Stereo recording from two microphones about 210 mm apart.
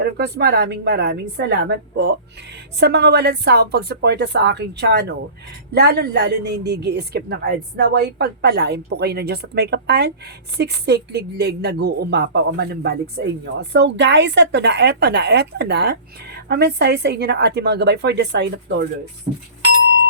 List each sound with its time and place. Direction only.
0.0 s speech: 50° right (ahead or behind)